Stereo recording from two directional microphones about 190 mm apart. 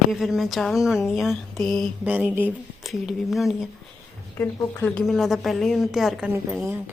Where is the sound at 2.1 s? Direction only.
10° right (ahead or behind).